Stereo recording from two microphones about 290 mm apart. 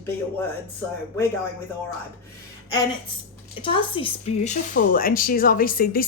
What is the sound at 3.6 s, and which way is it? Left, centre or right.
Speech, centre.